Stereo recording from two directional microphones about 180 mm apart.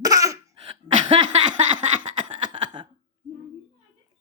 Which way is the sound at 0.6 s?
30° right (ahead or behind).